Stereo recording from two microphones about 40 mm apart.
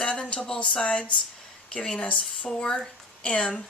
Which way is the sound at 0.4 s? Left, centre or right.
Left.